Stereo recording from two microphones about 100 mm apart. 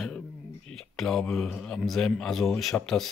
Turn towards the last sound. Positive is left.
turn(degrees=0)  # may be behind; listen again after turning